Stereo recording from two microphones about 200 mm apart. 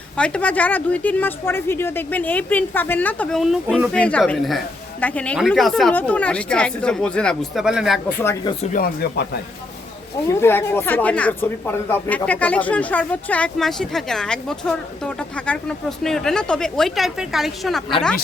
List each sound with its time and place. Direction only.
0.2 s speech: 5° left (ahead or behind)
8.2 s speech: 15° left (ahead or behind)
8.6 s speech: 45° left (ahead or behind)
10.2 s a woman's voice: 10° left (ahead or behind)